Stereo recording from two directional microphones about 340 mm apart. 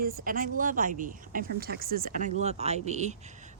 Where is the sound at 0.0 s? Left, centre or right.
Right.